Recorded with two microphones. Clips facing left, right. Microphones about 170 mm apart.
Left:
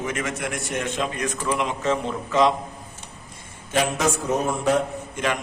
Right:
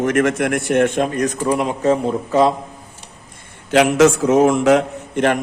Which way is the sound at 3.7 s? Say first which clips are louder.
Right 10 dB; 80° right.